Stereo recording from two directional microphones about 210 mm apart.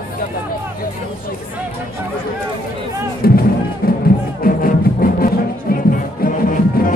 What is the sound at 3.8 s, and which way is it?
Music, 45° left (ahead or behind).